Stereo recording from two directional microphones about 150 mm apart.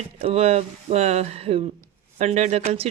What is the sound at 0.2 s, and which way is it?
Speech, 40° right (ahead or behind).